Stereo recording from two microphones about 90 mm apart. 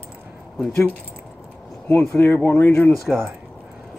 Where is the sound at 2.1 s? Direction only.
25° left (ahead or behind).